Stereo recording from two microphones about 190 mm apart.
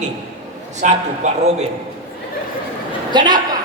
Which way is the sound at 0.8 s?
40° right (ahead or behind).